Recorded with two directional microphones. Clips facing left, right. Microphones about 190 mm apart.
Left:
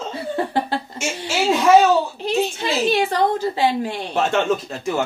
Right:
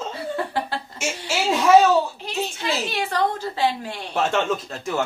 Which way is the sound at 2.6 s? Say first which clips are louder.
Left 6 dB; 20° left (ahead or behind).